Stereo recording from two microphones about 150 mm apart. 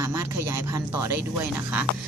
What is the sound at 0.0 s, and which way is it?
A woman's voice, 20° right (ahead or behind).